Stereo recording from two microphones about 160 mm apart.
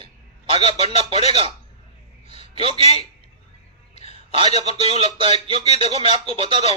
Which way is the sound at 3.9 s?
40° left (ahead or behind).